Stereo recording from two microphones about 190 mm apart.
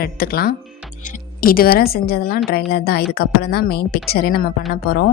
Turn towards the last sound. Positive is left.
turn(degrees=55)  # may be behind; listen again after turning